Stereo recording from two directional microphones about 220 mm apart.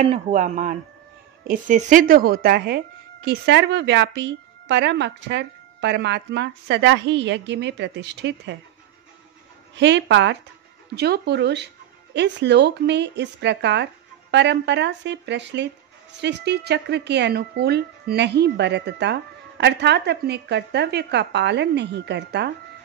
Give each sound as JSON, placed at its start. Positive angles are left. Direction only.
{"t": 0.0, "sound": "a woman's voice", "side_deg": -30}
{"t": 9.8, "sound": "a woman's voice", "side_deg": -55}